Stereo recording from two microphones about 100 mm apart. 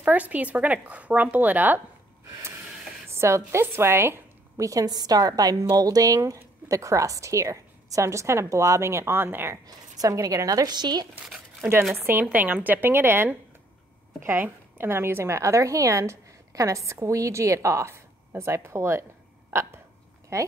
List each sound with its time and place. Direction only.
0.0 s speech: 15° right (ahead or behind)
3.1 s a woman's voice: 30° right (ahead or behind)
9.7 s a woman's voice: 35° right (ahead or behind)
11.2 s a sound: centre (ahead or behind)
11.9 s a woman's voice: 25° right (ahead or behind)
19.5 s a sound: 25° right (ahead or behind)
20.3 s a woman's voice: 30° right (ahead or behind)